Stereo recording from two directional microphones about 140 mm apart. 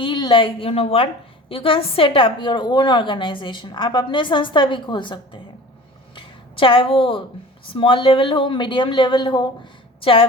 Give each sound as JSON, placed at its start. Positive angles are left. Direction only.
{"t": 0.0, "sound": "a woman's voice", "side_deg": 35}
{"t": 6.1, "sound": "a sound", "side_deg": 40}
{"t": 7.7, "sound": "a woman's voice", "side_deg": 40}